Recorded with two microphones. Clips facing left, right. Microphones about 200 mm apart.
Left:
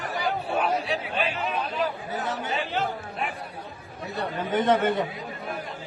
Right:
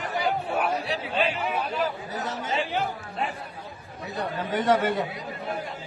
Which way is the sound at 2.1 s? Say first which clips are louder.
Left 2 dB; 40° right (ahead or behind).